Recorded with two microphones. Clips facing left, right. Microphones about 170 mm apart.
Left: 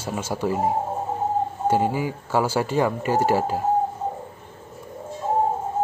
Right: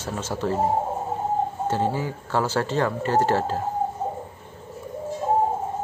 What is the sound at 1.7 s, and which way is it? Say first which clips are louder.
Speech: left 6 dB; 10° left (ahead or behind).